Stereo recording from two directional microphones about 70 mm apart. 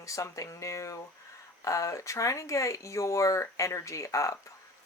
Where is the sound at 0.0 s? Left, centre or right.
Left.